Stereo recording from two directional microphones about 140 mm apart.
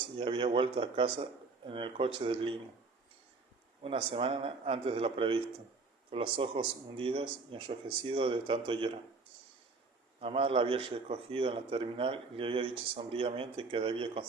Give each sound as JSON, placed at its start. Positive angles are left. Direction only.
{"t": 0.2, "sound": "speech", "side_deg": -40}
{"t": 3.8, "sound": "speech", "side_deg": -40}
{"t": 10.2, "sound": "speech", "side_deg": -40}